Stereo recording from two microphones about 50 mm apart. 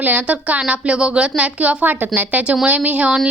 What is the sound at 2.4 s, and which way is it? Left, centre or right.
Speech, centre.